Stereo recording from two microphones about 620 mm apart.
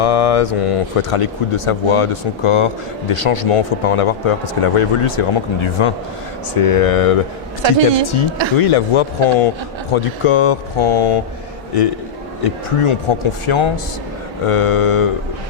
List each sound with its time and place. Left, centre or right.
0.0 s speech: left
6.5 s speech: left
7.6 s speech: right
8.5 s speech: left
12.4 s speech: left